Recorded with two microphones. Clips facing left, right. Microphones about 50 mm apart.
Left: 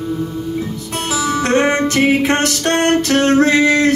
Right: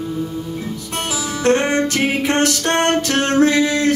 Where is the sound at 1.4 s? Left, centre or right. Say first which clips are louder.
Right 1 dB; left.